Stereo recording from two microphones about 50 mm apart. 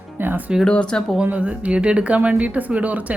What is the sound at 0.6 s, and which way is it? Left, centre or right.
Speech, centre.